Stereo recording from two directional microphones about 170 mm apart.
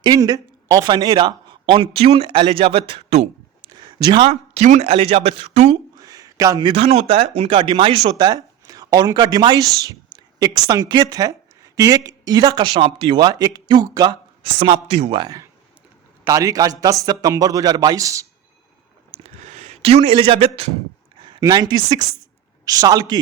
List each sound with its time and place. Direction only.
0.0 s a man's voice: 25° right (ahead or behind)
3.8 s a man's voice: 25° right (ahead or behind)
5.9 s a man's voice: 20° right (ahead or behind)
19.1 s a sound: 40° right (ahead or behind)
21.2 s a man's voice: 30° right (ahead or behind)